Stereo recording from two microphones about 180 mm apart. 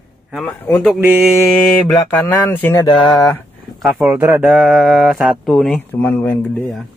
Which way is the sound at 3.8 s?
5° right (ahead or behind).